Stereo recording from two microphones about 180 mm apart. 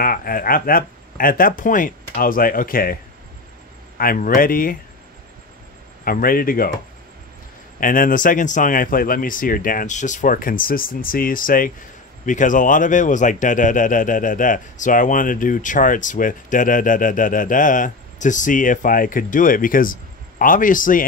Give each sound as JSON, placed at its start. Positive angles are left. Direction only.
{"t": 0.0, "sound": "a man's voice", "side_deg": 55}
{"t": 4.0, "sound": "a man's voice", "side_deg": 50}
{"t": 6.0, "sound": "a man's voice", "side_deg": 55}
{"t": 7.8, "sound": "a man's voice", "side_deg": 50}